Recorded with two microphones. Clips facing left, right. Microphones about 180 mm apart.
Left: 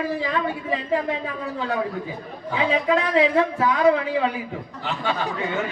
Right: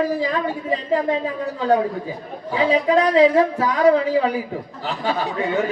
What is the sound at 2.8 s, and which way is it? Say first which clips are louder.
A man's voice: right 6 dB; 40° right (ahead or behind).